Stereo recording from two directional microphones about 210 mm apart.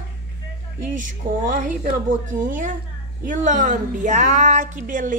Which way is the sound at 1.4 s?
40° right (ahead or behind).